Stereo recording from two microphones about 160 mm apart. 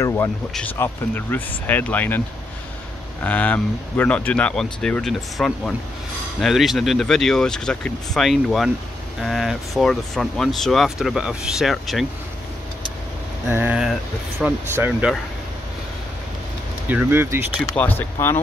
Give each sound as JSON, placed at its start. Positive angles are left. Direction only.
{"t": 0.0, "sound": "speech", "side_deg": 15}
{"t": 13.5, "sound": "speech", "side_deg": -10}
{"t": 16.8, "sound": "speech", "side_deg": -10}
{"t": 17.7, "sound": "speech", "side_deg": 10}